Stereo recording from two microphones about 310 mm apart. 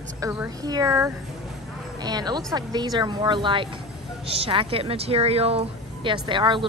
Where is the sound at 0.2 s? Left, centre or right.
Centre.